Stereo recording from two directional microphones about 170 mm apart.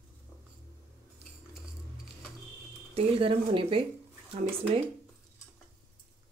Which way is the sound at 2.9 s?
35° right (ahead or behind).